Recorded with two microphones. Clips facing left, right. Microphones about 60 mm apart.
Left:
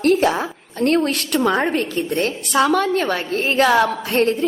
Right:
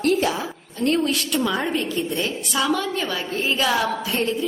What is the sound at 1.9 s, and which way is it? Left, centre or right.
A woman's voice, left.